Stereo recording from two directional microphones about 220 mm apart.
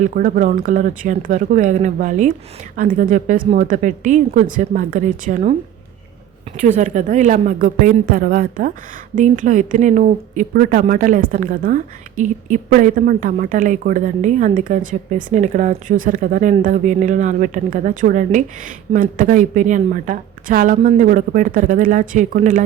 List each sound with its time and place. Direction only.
0.0 s speech: 35° right (ahead or behind)
6.6 s speech: 35° right (ahead or behind)